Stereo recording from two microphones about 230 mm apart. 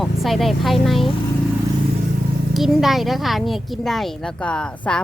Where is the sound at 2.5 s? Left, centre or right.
Centre.